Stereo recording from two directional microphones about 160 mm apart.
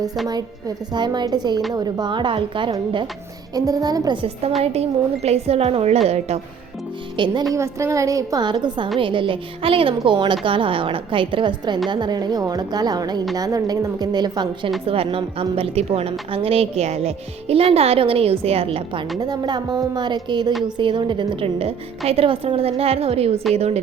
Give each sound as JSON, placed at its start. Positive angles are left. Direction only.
{"t": 0.9, "sound": "a woman's voice", "side_deg": -25}
{"t": 4.6, "sound": "a woman's voice", "side_deg": -40}
{"t": 7.2, "sound": "a woman's voice", "side_deg": -30}
{"t": 7.5, "sound": "a woman's voice", "side_deg": -20}
{"t": 19.2, "sound": "a woman's voice", "side_deg": -25}